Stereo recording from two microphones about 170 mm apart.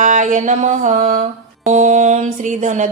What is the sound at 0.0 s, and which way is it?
Mantra, 50° right (ahead or behind).